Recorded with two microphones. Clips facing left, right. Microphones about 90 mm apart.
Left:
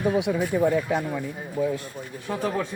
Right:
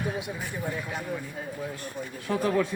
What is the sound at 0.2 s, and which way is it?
Speech, 85° left.